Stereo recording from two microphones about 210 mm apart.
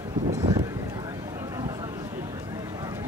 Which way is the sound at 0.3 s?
15° right (ahead or behind).